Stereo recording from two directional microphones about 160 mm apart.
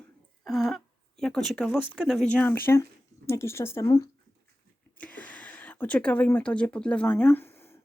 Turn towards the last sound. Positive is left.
turn(degrees=15)  # may be behind; listen again after turning